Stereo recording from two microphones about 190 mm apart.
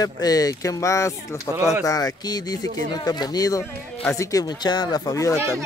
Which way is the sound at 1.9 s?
20° left (ahead or behind).